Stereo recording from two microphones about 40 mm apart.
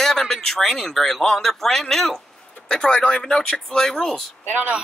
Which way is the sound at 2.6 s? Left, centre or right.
Left.